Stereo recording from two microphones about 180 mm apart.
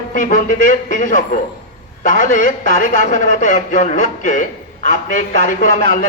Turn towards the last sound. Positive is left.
turn(degrees=45)  # may be behind; listen again after turning